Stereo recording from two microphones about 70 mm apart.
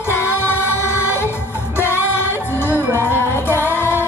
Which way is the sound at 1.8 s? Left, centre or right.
Right.